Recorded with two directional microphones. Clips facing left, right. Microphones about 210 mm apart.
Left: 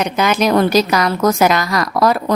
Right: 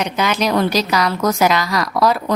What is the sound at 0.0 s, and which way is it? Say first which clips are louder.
A woman's voice: left 3 dB; 50° left (ahead or behind).